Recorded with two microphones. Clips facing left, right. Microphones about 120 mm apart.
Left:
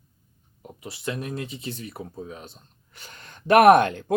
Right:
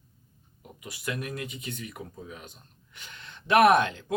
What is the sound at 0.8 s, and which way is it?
Speech, 30° left (ahead or behind).